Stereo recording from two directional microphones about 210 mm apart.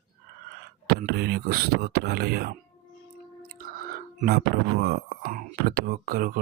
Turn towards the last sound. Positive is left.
turn(degrees=-45)  # may be behind; listen again after turning